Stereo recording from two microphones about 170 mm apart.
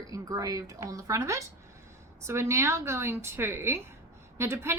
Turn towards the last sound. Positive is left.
turn(degrees=-15)  # may be behind; listen again after turning